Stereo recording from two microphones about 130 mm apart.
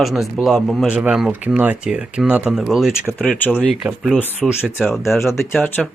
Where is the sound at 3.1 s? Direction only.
10° left (ahead or behind).